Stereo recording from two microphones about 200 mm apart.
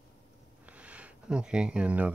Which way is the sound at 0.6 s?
5° right (ahead or behind).